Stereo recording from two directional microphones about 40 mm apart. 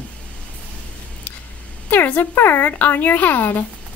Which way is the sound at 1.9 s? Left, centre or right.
Left.